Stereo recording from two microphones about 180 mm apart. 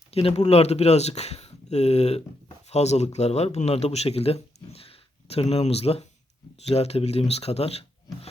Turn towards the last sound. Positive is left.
turn(degrees=35)  # may be behind; listen again after turning